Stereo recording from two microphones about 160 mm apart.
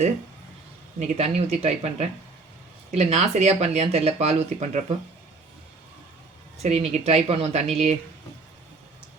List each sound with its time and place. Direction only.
0.9 s speech: 45° right (ahead or behind)
6.6 s speech: 40° right (ahead or behind)